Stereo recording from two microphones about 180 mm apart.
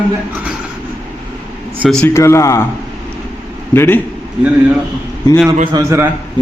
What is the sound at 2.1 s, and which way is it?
Speech, 15° left (ahead or behind).